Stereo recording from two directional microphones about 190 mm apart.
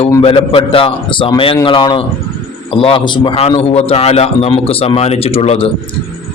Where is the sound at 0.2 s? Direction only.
30° left (ahead or behind).